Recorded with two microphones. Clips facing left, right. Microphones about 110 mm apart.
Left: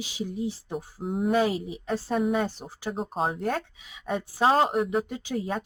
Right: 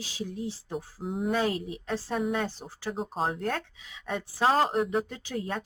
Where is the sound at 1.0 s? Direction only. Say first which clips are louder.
Left 4 dB; centre (ahead or behind).